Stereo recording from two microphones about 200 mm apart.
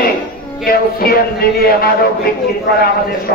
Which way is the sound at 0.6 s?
50° left (ahead or behind).